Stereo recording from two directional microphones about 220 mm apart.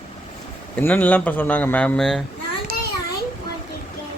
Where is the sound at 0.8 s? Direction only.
5° left (ahead or behind).